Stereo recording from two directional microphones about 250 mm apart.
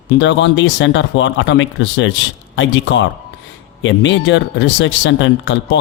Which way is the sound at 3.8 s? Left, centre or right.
Left.